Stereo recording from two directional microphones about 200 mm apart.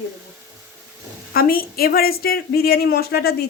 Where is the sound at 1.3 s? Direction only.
45° left (ahead or behind).